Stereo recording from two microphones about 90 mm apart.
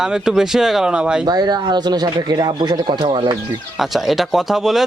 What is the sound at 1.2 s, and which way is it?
Speech, 45° right (ahead or behind).